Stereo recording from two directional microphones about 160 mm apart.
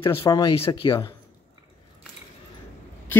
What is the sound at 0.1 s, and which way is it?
Speech, 15° left (ahead or behind).